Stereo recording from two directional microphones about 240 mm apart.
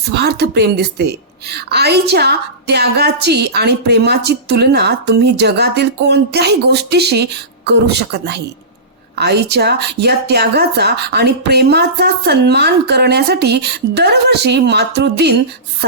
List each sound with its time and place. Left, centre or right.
0.1 s a woman's voice: right